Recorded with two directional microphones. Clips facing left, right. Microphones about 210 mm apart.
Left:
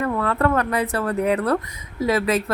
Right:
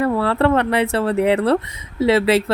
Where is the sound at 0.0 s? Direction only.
30° right (ahead or behind).